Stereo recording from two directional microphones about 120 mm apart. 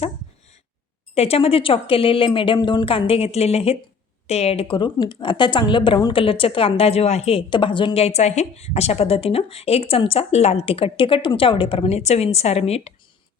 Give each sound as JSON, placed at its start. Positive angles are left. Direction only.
{"t": 1.1, "sound": "a woman's voice", "side_deg": 55}
{"t": 8.0, "sound": "speech", "side_deg": 65}